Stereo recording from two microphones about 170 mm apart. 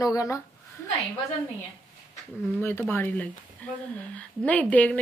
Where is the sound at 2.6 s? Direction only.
15° left (ahead or behind).